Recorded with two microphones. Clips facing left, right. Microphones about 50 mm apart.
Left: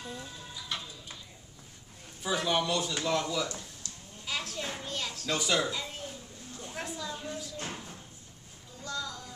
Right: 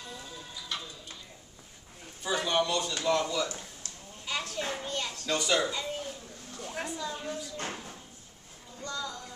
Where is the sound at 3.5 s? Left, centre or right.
Right.